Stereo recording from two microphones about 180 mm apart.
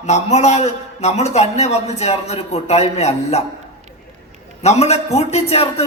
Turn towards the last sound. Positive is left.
turn(degrees=35)  # may be behind; listen again after turning